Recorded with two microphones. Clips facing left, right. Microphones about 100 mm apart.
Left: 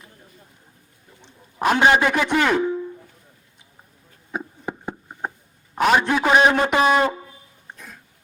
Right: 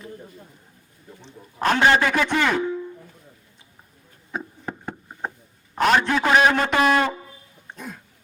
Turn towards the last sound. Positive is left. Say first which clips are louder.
# left 2 dB
turn(degrees=20)  # may be behind; listen again after turning